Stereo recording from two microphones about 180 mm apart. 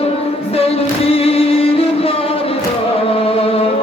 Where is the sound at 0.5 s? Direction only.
35° left (ahead or behind).